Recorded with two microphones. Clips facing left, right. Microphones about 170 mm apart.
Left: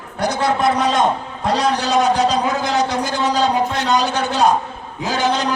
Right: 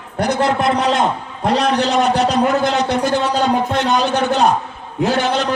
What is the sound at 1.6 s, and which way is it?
A man's voice, 60° right (ahead or behind).